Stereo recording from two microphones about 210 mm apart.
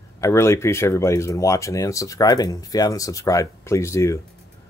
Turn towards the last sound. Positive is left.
turn(degrees=15)  # may be behind; listen again after turning